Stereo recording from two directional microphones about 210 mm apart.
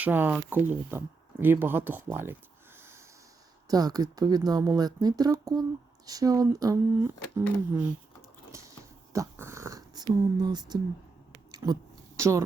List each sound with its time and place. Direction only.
0.0 s speech: 10° right (ahead or behind)
2.7 s snort: 10° right (ahead or behind)
3.7 s speech: 20° right (ahead or behind)
8.5 s dog: 15° right (ahead or behind)
11.5 s a sound: 15° right (ahead or behind)